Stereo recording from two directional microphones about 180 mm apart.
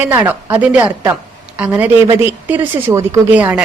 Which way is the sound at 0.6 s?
10° right (ahead or behind).